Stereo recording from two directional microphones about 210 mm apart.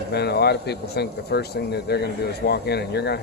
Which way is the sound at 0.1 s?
50° left (ahead or behind).